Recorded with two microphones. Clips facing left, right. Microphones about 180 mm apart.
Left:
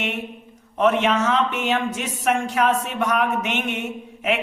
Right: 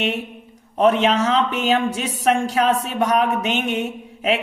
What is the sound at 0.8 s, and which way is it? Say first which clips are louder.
Speech: right 2 dB; 35° right (ahead or behind).